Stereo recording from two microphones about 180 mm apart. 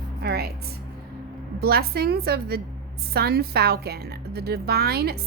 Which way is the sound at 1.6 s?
60° right (ahead or behind).